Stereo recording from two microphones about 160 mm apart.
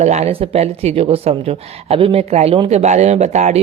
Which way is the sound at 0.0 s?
45° right (ahead or behind).